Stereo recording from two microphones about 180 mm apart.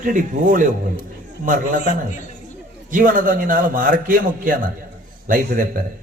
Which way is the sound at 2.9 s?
50° right (ahead or behind).